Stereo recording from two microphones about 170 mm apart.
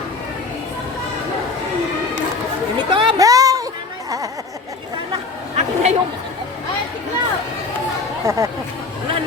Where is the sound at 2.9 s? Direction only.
30° right (ahead or behind).